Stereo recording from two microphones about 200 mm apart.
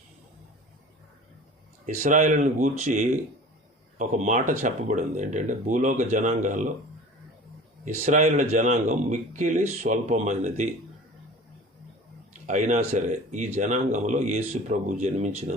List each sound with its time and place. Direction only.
2.0 s speech: 35° right (ahead or behind)
8.0 s speech: 35° right (ahead or behind)
12.5 s speech: 35° right (ahead or behind)